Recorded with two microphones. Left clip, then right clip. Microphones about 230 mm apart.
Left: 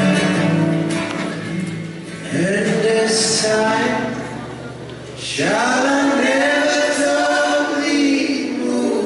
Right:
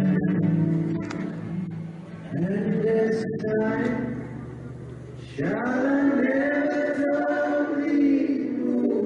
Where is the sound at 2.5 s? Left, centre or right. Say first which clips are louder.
Left 7 dB; centre.